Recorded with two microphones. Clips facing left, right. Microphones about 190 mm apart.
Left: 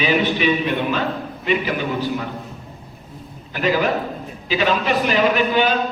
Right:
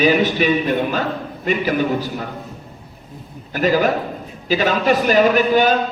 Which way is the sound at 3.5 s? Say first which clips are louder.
Right 3 dB; 45° right (ahead or behind).